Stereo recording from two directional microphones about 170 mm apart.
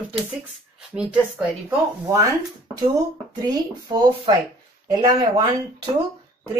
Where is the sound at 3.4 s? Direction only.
25° right (ahead or behind).